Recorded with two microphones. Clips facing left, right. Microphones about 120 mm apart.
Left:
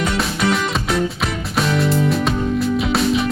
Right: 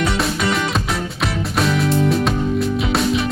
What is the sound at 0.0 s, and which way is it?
Music, centre (ahead or behind).